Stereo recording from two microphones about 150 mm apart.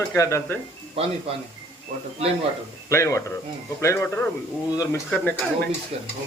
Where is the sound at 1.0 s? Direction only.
40° right (ahead or behind).